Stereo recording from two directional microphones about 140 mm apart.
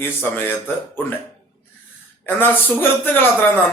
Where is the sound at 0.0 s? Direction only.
15° left (ahead or behind).